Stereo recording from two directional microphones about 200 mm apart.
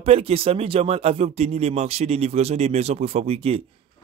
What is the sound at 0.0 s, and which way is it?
Speech, 30° right (ahead or behind).